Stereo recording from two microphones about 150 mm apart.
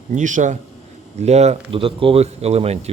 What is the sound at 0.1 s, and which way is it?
Speech, 55° right (ahead or behind).